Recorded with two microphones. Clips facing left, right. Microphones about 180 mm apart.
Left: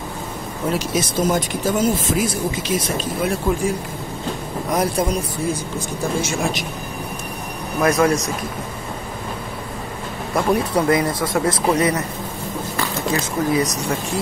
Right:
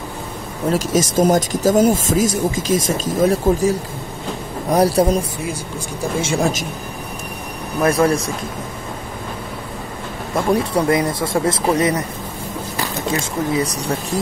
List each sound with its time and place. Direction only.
0.7 s a man's voice: 45° right (ahead or behind)
6.2 s a man's voice: 35° right (ahead or behind)
7.8 s speech: 30° right (ahead or behind)
10.3 s speech: 25° right (ahead or behind)
13.1 s speech: 25° right (ahead or behind)